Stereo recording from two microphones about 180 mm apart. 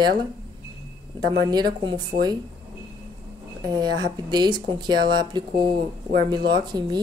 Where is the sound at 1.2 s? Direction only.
25° right (ahead or behind).